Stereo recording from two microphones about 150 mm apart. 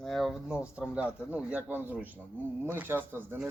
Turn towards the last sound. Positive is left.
turn(degrees=-15)  # may be behind; listen again after turning